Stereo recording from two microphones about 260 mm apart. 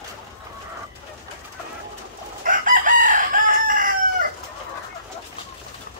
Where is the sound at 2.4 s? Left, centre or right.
Right.